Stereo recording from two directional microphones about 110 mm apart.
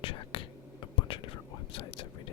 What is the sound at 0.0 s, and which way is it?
Whispering, 55° left (ahead or behind).